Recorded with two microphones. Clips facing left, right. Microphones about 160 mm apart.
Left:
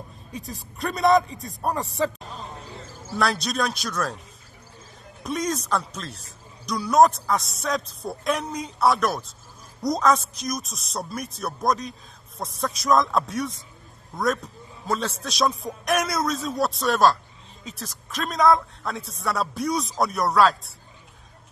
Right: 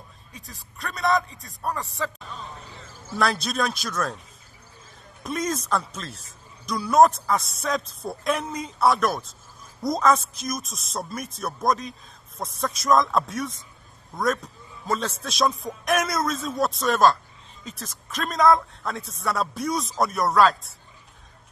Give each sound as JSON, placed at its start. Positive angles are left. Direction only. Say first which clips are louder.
{"t": 1.0, "sound": "a man's voice", "louder": "left 5 dB", "side_deg": 35}
{"t": 3.1, "sound": "speech", "louder": "even", "side_deg": 0}
{"t": 5.2, "sound": "speech", "louder": "left 1 dB", "side_deg": 0}